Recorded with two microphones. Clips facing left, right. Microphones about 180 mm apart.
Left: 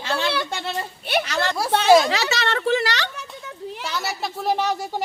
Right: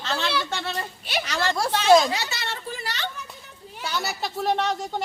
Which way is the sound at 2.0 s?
85° left.